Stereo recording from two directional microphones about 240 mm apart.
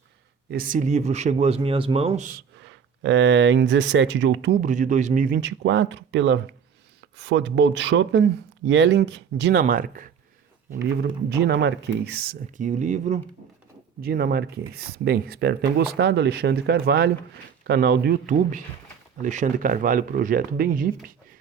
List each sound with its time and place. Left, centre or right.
0.5 s a man's voice: right
2.6 s speech: right
4.6 s speech: right
11.3 s speech: right